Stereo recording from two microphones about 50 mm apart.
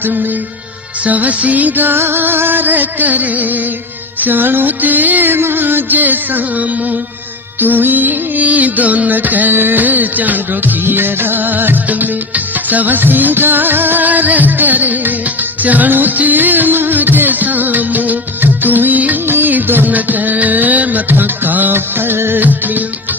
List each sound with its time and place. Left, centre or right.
0.0 s music: right
18.6 s music of bollywood: right
19.2 s music: right